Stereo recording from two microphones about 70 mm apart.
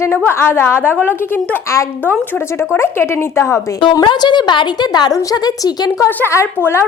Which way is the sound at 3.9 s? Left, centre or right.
Left.